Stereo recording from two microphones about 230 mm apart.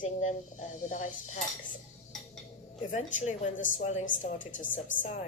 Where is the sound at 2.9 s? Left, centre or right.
Left.